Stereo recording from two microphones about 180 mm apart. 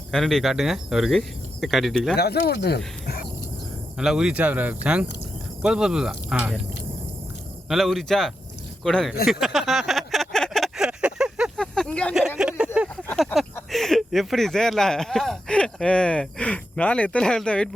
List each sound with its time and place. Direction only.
0.1 s speech: centre (ahead or behind)
2.1 s speech: 65° left (ahead or behind)
3.9 s speech: 5° right (ahead or behind)
7.7 s speech: centre (ahead or behind)
9.2 s a sound: centre (ahead or behind)
12.4 s speech: 5° right (ahead or behind)